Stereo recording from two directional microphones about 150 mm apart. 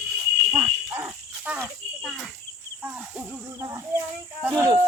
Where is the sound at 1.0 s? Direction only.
15° right (ahead or behind).